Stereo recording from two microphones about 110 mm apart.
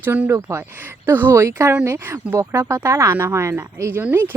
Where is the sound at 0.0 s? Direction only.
20° right (ahead or behind).